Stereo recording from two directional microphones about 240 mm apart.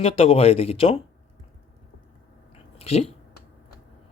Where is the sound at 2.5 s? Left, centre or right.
Left.